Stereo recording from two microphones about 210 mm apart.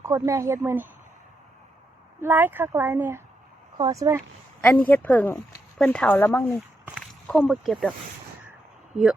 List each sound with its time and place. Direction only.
0.0 s speech: 15° right (ahead or behind)
2.2 s speech: 10° right (ahead or behind)
4.6 s speech: 5° left (ahead or behind)
6.8 s speech: centre (ahead or behind)